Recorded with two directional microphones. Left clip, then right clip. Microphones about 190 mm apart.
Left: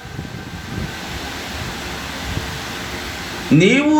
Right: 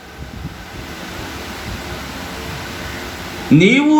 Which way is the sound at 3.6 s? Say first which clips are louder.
Right 2 dB; 40° right (ahead or behind).